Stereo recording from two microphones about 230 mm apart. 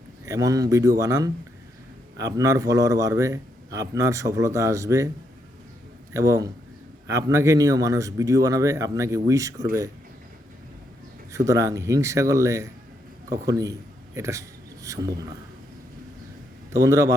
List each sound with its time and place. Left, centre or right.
0.3 s a man's voice: centre
6.1 s a man's voice: centre
11.3 s a man's voice: centre
16.7 s a man's voice: centre